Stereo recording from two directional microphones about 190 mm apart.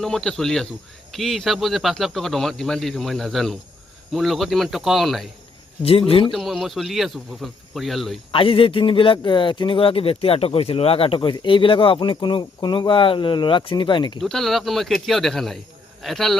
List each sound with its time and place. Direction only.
0.0 s a man's voice: centre (ahead or behind)
5.8 s speech: 30° left (ahead or behind)
6.3 s a man's voice: centre (ahead or behind)
8.3 s speech: 30° left (ahead or behind)
14.2 s a man's voice: centre (ahead or behind)